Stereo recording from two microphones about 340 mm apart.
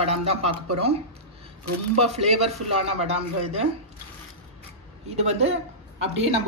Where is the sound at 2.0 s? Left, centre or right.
Centre.